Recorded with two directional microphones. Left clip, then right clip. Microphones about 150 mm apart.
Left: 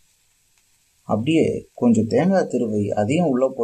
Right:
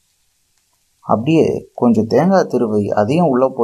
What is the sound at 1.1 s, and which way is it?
Speech, 20° right (ahead or behind).